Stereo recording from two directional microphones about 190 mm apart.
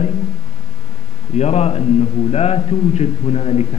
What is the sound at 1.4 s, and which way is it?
A man's voice, 35° left (ahead or behind).